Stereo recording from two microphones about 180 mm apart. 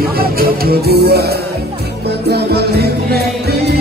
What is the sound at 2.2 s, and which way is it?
Music, 60° right (ahead or behind).